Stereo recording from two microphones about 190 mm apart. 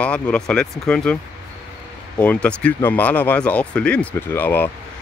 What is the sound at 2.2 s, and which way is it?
Speech, 5° left (ahead or behind).